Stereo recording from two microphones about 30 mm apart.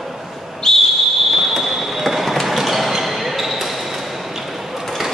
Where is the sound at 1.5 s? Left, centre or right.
Centre.